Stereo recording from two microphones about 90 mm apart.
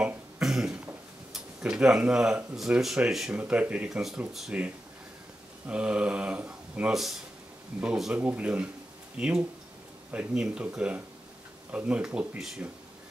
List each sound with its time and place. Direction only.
0.0 s cough: 5° right (ahead or behind)
1.3 s speech: 10° right (ahead or behind)
4.3 s speech: 5° right (ahead or behind)
5.7 s speech: 10° right (ahead or behind)
6.9 s speech: 5° right (ahead or behind)
11.7 s speech: 10° right (ahead or behind)